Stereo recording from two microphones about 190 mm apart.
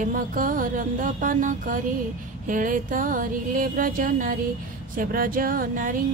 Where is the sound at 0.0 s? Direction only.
45° right (ahead or behind).